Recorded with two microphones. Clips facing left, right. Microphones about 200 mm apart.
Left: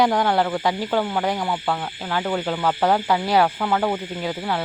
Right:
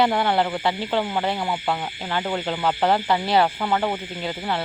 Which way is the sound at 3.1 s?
10° left (ahead or behind).